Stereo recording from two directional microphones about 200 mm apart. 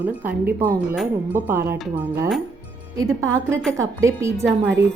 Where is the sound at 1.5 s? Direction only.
10° right (ahead or behind).